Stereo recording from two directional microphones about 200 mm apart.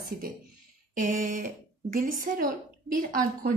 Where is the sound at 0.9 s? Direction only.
40° right (ahead or behind).